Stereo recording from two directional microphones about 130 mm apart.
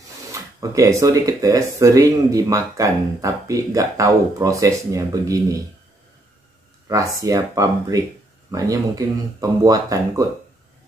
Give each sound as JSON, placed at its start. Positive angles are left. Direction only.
{"t": 0.3, "sound": "speech", "side_deg": -25}
{"t": 7.2, "sound": "speech", "side_deg": -25}